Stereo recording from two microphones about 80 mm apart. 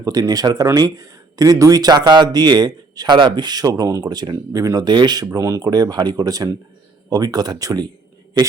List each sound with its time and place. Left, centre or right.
0.0 s speech: right
4.9 s speech: right
5.7 s speech: right